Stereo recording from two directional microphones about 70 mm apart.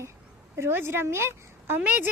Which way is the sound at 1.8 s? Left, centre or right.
Right.